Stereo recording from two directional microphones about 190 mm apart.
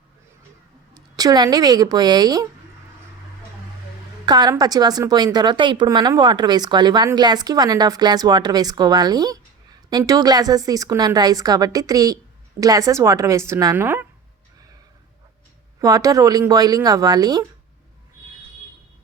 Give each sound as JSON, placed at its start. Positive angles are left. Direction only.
{"t": 0.9, "sound": "speech", "side_deg": -20}
{"t": 4.3, "sound": "a woman's voice", "side_deg": -20}
{"t": 15.8, "sound": "a woman's voice", "side_deg": -15}